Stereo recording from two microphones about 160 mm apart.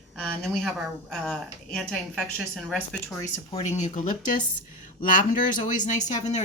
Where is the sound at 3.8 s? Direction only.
50° left (ahead or behind).